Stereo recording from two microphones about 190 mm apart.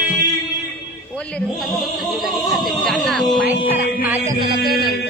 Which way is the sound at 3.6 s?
10° right (ahead or behind).